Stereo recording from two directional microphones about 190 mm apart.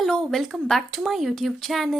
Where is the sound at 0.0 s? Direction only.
Centre (ahead or behind).